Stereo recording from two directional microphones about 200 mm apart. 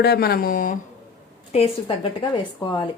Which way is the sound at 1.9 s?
30° left (ahead or behind).